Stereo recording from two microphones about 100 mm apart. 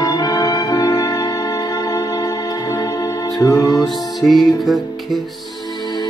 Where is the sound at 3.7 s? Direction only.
Centre (ahead or behind).